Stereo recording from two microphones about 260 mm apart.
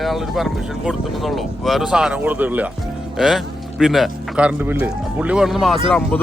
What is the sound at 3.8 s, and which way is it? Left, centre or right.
Speech, centre.